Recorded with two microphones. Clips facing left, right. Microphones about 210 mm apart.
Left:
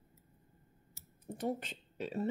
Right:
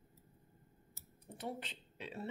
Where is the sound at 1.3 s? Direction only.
45° left (ahead or behind).